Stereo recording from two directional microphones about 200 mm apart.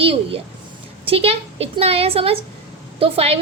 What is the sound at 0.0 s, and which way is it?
A woman's voice, 30° right (ahead or behind).